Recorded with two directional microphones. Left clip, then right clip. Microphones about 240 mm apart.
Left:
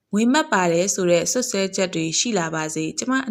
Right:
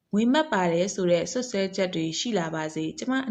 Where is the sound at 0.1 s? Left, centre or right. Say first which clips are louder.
Left 4 dB; left.